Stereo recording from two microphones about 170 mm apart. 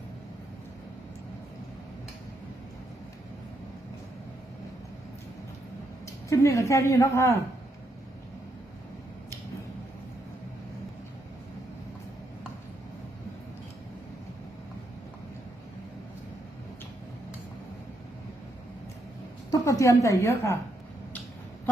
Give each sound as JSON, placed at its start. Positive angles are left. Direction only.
{"t": 6.1, "sound": "a woman's voice", "side_deg": 20}
{"t": 19.5, "sound": "a woman's voice", "side_deg": 20}